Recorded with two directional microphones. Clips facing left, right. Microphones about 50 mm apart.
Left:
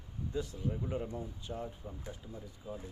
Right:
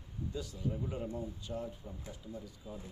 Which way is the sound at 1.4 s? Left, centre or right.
Left.